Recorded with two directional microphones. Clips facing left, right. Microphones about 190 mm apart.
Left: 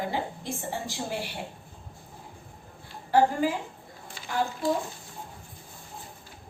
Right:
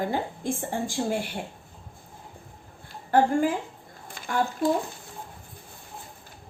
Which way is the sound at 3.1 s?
50° right (ahead or behind).